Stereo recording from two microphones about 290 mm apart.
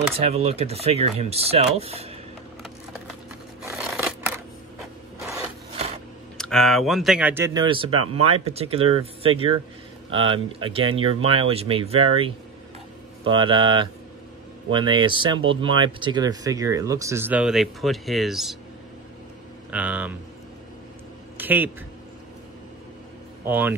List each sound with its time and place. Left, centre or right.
0.2 s speech: centre
3.6 s scissors: centre
6.3 s speech: centre
19.7 s speech: centre
21.4 s a sound: centre
23.4 s speech: centre